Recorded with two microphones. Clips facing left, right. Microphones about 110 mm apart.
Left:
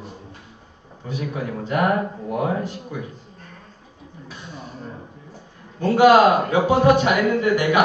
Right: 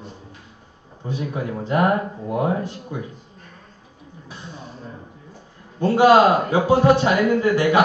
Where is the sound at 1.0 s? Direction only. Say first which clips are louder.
Right 1 dB; 25° right (ahead or behind).